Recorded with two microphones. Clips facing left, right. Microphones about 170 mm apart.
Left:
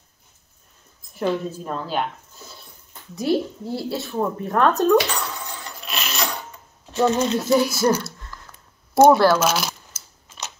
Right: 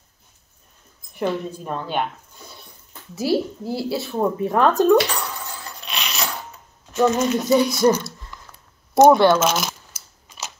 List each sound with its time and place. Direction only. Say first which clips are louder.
1.1 s speech: left 1 dB; centre (ahead or behind)
3.2 s speech: right 1 dB; 5° right (ahead or behind)
5.8 s coin: left 1 dB; centre (ahead or behind)
7.1 s speech: even; 30° left (ahead or behind)
7.3 s speech: right 1 dB; centre (ahead or behind)
9.9 s crushing: even; 5° right (ahead or behind)